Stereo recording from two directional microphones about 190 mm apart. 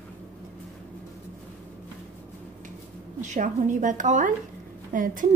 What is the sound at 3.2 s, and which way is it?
A woman's voice, 40° right (ahead or behind).